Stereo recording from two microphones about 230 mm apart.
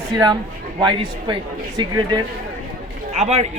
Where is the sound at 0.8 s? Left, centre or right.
Centre.